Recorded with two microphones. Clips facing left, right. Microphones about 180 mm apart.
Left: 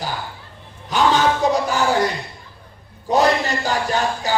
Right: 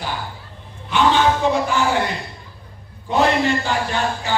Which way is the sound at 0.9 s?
40° left (ahead or behind).